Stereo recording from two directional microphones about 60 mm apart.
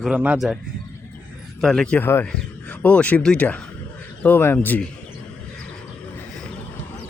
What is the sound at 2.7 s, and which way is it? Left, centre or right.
Speech, left.